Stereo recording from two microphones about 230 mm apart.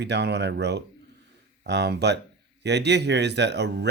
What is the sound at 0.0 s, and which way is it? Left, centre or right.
Speech, right.